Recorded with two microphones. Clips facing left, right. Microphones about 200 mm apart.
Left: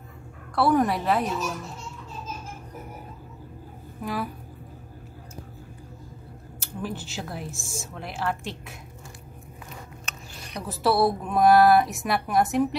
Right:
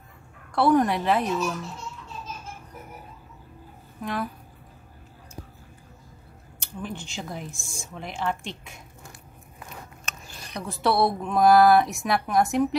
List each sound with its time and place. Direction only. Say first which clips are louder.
0.6 s speech: right 1 dB; centre (ahead or behind)
4.0 s speech: even; 5° left (ahead or behind)
6.6 s speech: left 2 dB; 5° left (ahead or behind)
10.5 s speech: left 1 dB; centre (ahead or behind)